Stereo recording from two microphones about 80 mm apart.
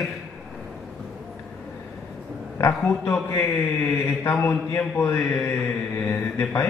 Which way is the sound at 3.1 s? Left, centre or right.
Left.